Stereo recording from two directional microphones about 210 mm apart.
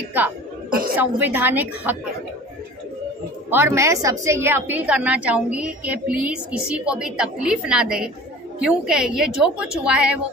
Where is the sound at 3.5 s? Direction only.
10° right (ahead or behind).